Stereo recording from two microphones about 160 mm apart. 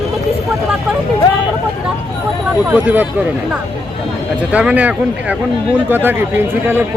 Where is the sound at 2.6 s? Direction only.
10° right (ahead or behind).